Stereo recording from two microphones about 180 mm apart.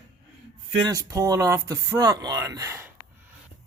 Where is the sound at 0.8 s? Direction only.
20° right (ahead or behind).